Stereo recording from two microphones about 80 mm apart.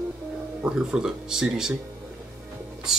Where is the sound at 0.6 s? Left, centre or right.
Centre.